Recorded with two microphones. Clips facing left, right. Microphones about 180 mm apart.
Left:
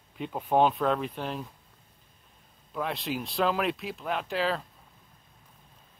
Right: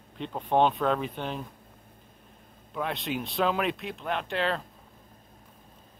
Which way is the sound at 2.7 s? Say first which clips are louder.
Even; centre (ahead or behind).